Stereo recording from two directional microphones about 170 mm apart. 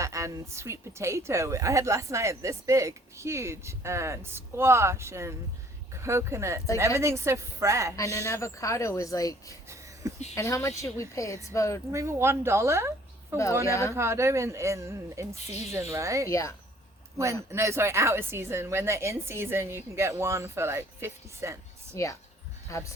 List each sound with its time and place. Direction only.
0.0 s a woman's voice: 20° right (ahead or behind)
7.9 s speech: 20° left (ahead or behind)
9.6 s a sound: 15° right (ahead or behind)
10.3 s speech: 15° left (ahead or behind)
11.9 s a woman's voice: 15° right (ahead or behind)
16.3 s speech: 20° left (ahead or behind)
17.5 s a woman's voice: 15° right (ahead or behind)
21.9 s speech: 20° left (ahead or behind)